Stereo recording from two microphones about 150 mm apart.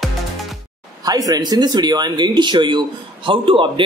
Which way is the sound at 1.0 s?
25° right (ahead or behind).